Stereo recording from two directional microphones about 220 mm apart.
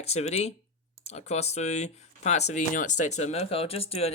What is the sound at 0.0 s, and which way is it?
Speech, 30° left (ahead or behind).